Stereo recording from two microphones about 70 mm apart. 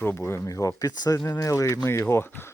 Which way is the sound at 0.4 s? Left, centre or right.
Left.